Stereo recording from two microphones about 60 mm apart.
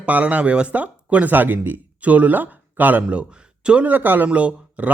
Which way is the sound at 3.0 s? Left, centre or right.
Centre.